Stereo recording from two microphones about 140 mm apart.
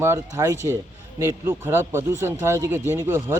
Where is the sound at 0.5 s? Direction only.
20° left (ahead or behind).